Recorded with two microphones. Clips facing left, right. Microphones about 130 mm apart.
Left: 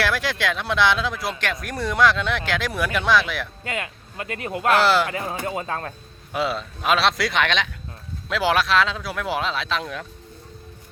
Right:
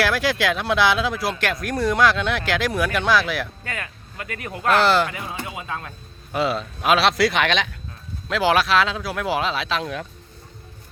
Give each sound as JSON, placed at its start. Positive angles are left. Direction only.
{"t": 0.0, "sound": "speech", "side_deg": 0}
{"t": 3.6, "sound": "speech", "side_deg": 25}
{"t": 4.7, "sound": "speech", "side_deg": 5}
{"t": 5.0, "sound": "speech", "side_deg": 35}
{"t": 6.3, "sound": "speech", "side_deg": 0}